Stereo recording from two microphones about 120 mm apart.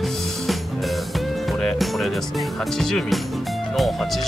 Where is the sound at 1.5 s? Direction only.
Centre (ahead or behind).